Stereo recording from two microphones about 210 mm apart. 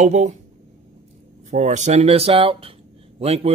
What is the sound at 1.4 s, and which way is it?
Speech, 35° right (ahead or behind).